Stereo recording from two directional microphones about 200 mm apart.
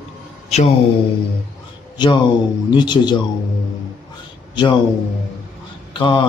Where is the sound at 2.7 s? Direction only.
20° left (ahead or behind).